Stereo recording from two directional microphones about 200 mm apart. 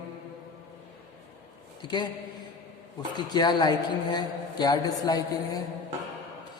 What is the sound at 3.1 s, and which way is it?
A woman's voice, 20° left (ahead or behind).